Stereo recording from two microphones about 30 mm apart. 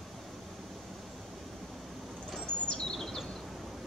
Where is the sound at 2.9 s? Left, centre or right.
Centre.